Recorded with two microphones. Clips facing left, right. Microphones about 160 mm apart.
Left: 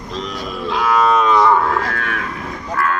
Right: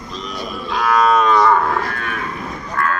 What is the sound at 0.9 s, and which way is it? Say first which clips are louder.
Livestock: even; 5° left (ahead or behind).